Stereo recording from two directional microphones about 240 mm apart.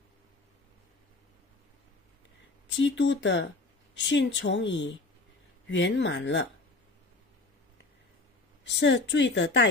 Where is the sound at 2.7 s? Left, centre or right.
Left.